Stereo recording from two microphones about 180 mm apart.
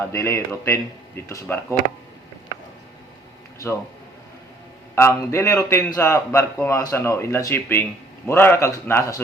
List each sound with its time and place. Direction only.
0.0 s speech: 15° left (ahead or behind)
4.9 s speech: 15° left (ahead or behind)